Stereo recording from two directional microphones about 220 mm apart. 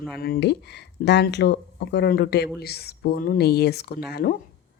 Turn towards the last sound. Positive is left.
turn(degrees=45)  # may be behind; listen again after turning